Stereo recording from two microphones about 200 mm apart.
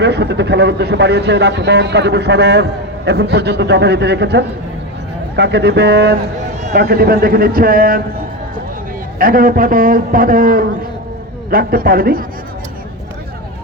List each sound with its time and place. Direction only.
0.0 s a man's voice: 55° right (ahead or behind)
9.1 s a man's voice: 45° right (ahead or behind)